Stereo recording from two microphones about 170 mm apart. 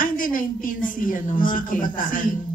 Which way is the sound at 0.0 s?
55° left (ahead or behind).